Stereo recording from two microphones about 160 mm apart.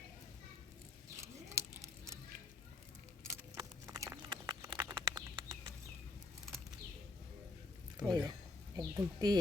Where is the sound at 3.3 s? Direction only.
20° right (ahead or behind).